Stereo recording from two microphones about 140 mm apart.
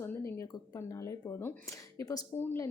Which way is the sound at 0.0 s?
15° left (ahead or behind).